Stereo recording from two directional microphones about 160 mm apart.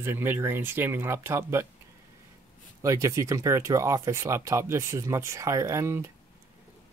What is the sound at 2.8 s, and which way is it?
Speech, 20° right (ahead or behind).